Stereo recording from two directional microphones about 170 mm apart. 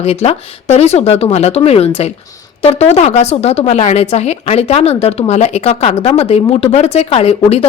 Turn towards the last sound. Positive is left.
turn(degrees=35)  # may be behind; listen again after turning